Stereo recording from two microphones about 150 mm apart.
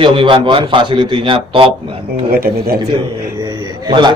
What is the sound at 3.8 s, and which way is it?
Speech, 30° right (ahead or behind).